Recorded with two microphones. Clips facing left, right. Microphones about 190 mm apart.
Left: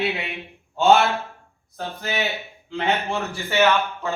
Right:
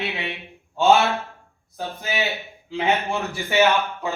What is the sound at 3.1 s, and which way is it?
Speech, 15° right (ahead or behind).